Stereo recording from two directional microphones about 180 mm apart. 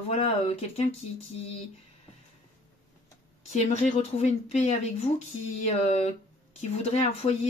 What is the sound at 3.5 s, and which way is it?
Speech, 40° left (ahead or behind).